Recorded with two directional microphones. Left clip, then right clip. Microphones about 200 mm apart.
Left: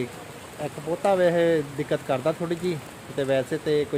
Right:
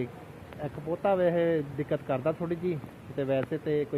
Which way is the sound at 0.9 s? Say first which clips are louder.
Left 5 dB; 10° left (ahead or behind).